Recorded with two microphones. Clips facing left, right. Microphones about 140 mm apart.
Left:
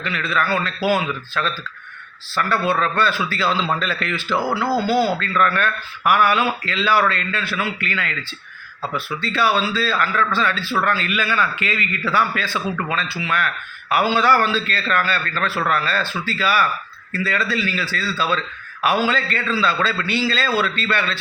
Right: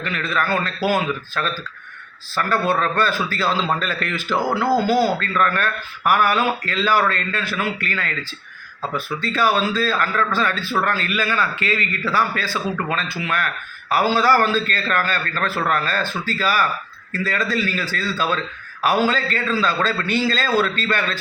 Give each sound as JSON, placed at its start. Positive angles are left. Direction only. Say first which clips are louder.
{"t": 0.0, "sound": "a man's voice", "louder": "left 1 dB", "side_deg": -45}